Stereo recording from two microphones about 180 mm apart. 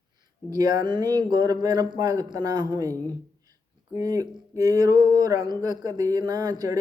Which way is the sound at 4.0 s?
20° right (ahead or behind).